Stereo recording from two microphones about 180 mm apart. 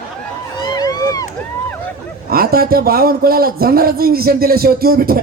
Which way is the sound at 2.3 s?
55° right (ahead or behind).